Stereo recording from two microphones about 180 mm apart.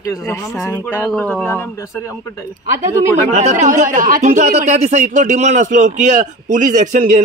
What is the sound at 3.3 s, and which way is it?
Speech, 40° right (ahead or behind).